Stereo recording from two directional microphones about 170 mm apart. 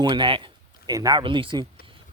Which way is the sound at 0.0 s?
25° right (ahead or behind).